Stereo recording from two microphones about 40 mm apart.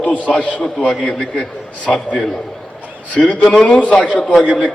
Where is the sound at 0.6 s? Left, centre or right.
Left.